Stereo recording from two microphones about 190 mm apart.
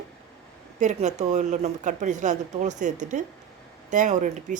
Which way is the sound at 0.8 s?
40° right (ahead or behind).